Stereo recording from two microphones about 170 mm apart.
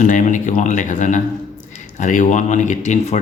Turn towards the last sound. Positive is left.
turn(degrees=45)  # may be behind; listen again after turning